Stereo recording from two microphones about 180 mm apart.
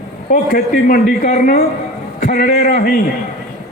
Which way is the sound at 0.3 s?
50° left (ahead or behind).